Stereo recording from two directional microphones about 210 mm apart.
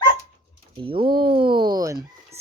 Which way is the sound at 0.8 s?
25° right (ahead or behind).